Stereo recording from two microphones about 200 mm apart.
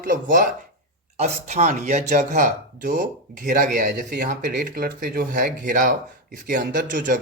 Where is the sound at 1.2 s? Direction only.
35° right (ahead or behind).